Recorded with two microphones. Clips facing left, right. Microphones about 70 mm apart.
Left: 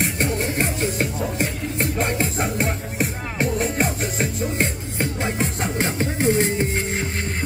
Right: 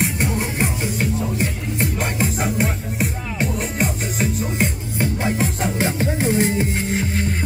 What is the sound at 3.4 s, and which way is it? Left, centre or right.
Music, left.